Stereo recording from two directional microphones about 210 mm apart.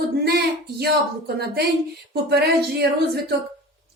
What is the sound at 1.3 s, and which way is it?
Speech, 50° right (ahead or behind).